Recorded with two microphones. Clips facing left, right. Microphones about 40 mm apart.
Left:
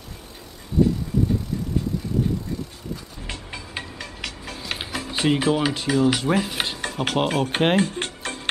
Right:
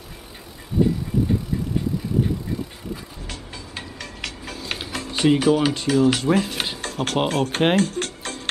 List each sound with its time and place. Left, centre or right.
3.3 s music: centre
4.9 s speech: centre
6.8 s dishes: centre
7.2 s speech: centre
8.2 s music: centre